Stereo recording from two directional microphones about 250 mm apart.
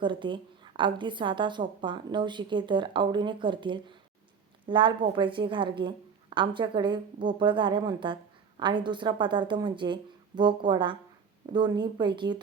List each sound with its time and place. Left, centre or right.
0.0 s a woman's voice: centre